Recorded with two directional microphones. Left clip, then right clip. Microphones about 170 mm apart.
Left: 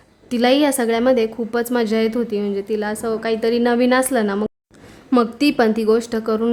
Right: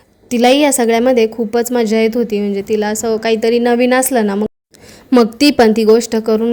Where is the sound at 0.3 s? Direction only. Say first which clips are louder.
Right 5 dB; 15° right (ahead or behind).